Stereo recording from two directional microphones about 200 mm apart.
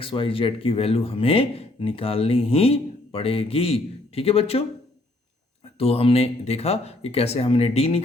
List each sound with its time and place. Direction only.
0.0 s speech: 25° left (ahead or behind)
5.8 s speech: 30° left (ahead or behind)